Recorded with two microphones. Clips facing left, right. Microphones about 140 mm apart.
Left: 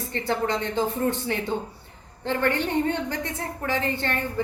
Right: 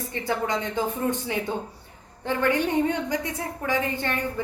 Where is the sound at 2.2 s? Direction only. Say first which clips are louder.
Right 1 dB; 10° right (ahead or behind).